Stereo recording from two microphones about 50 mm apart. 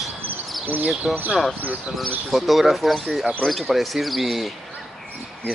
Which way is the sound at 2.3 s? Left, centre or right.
Centre.